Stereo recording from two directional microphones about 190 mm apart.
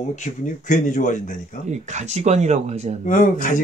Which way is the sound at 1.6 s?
35° right (ahead or behind).